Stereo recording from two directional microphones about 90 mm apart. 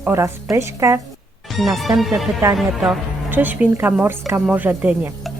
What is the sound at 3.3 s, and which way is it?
Speech, 20° right (ahead or behind).